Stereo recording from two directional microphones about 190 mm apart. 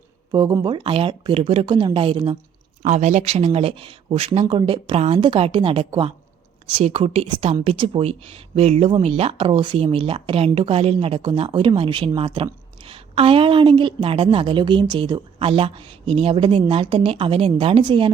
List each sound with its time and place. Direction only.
0.3 s speech: 20° right (ahead or behind)
2.8 s speech: 40° right (ahead or behind)